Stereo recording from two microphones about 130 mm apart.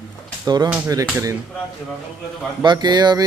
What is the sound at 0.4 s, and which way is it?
Speech, 30° right (ahead or behind).